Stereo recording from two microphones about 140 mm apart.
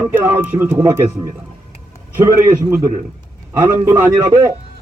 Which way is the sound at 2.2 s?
20° right (ahead or behind).